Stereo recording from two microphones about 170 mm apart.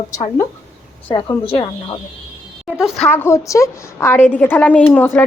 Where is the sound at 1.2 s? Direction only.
35° left (ahead or behind).